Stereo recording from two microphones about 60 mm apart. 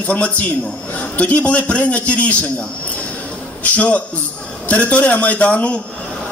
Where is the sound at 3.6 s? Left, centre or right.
Left.